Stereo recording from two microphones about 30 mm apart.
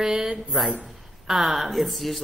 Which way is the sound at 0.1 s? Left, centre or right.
Right.